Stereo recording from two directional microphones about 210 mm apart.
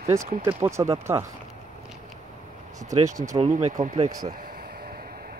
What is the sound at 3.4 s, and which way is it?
Speech, 30° right (ahead or behind).